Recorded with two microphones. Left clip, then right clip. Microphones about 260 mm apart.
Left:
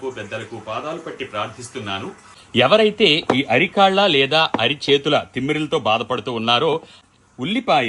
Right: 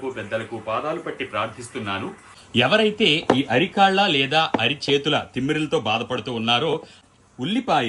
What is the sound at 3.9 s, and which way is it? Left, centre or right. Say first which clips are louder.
Speech: left 3 dB; left.